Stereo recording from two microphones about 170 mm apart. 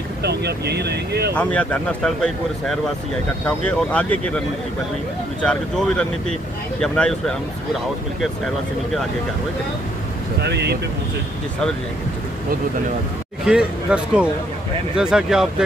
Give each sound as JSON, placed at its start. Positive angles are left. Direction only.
{"t": 0.2, "sound": "speech", "side_deg": -75}
{"t": 1.3, "sound": "speech", "side_deg": 5}
{"t": 5.4, "sound": "speech", "side_deg": 5}
{"t": 10.4, "sound": "speech", "side_deg": -75}
{"t": 13.5, "sound": "speech", "side_deg": -5}